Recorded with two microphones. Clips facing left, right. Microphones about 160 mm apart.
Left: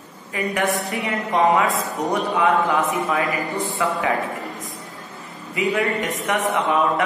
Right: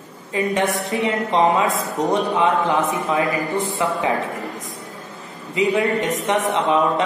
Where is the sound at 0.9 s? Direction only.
20° right (ahead or behind).